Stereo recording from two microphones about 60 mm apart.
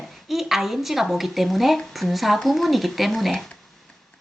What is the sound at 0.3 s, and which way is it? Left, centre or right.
Speech, centre.